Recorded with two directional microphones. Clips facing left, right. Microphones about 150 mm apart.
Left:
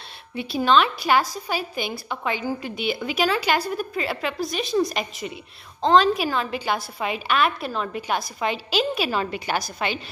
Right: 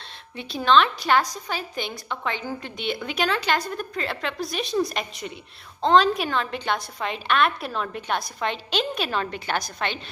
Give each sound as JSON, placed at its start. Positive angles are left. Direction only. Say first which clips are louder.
{"t": 0.4, "sound": "a woman's voice", "louder": "even", "side_deg": 10}